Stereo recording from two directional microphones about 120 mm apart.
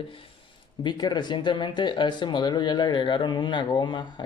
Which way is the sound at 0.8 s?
35° left (ahead or behind).